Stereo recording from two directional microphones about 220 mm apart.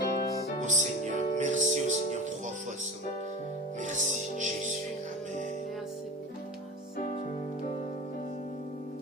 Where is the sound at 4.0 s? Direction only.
35° left (ahead or behind).